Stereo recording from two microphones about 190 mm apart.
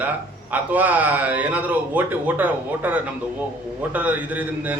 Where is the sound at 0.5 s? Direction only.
10° right (ahead or behind).